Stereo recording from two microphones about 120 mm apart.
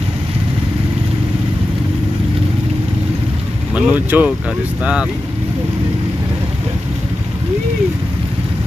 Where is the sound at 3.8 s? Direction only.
10° right (ahead or behind).